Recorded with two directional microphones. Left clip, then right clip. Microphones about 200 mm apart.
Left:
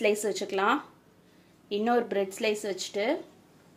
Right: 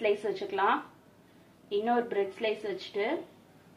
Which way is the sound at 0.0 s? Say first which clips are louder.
Left 2 dB; 65° left (ahead or behind).